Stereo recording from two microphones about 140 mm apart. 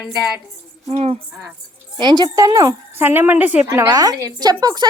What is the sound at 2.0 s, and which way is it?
Speech, 30° right (ahead or behind).